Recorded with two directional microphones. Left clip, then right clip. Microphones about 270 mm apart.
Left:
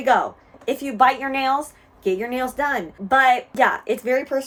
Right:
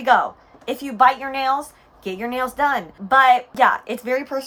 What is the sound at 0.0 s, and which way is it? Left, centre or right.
A woman's voice, centre.